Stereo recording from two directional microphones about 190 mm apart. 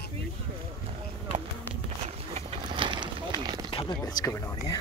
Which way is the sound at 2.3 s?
30° right (ahead or behind).